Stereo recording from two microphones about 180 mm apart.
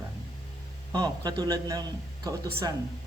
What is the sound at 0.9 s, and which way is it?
Speech, 20° right (ahead or behind).